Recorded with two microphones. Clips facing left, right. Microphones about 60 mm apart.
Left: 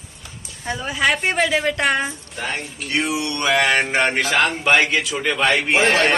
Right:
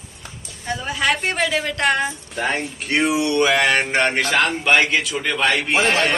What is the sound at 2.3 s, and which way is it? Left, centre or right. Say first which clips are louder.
Speech: right 5 dB; right.